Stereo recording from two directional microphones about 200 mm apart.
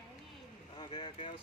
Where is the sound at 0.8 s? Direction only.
25° left (ahead or behind).